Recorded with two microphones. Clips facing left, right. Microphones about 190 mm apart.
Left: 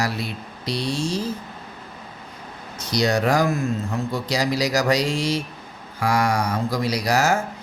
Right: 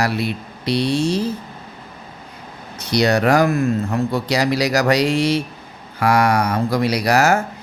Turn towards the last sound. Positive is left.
turn(degrees=-65)  # may be behind; listen again after turning